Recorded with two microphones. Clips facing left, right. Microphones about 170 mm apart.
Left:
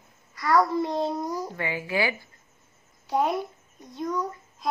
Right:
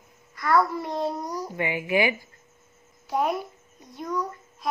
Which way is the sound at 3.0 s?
20° left (ahead or behind).